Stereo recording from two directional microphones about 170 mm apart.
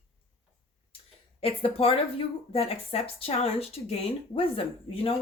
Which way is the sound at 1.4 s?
35° left (ahead or behind).